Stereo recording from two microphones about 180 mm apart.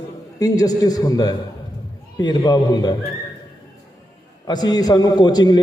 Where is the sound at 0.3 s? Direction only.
20° left (ahead or behind).